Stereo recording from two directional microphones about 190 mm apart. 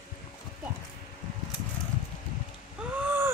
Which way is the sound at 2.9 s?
10° right (ahead or behind).